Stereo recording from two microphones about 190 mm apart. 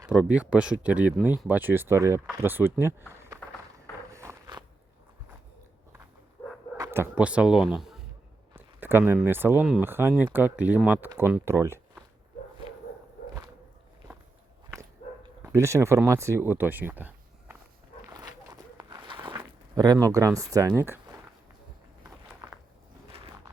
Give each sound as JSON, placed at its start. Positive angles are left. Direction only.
{"t": 0.0, "sound": "speech", "side_deg": -5}
{"t": 3.4, "sound": "a sound", "side_deg": 5}
{"t": 4.1, "sound": "a sound", "side_deg": -15}
{"t": 6.7, "sound": "speech", "side_deg": -15}
{"t": 15.5, "sound": "speech", "side_deg": -15}
{"t": 18.1, "sound": "zipper", "side_deg": -20}